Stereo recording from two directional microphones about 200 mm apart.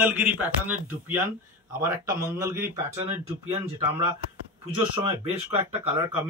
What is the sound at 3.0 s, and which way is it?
Speech, 30° right (ahead or behind).